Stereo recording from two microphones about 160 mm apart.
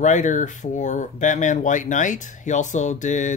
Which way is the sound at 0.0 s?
50° left (ahead or behind).